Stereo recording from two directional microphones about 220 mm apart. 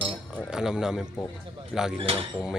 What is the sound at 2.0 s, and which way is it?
Speech, 25° right (ahead or behind).